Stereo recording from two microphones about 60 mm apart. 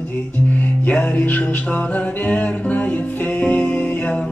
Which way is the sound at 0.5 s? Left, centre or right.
Left.